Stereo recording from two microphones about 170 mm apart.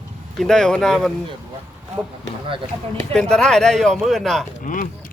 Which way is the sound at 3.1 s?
5° left (ahead or behind).